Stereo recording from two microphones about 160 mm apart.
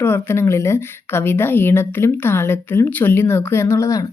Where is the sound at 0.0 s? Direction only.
15° left (ahead or behind).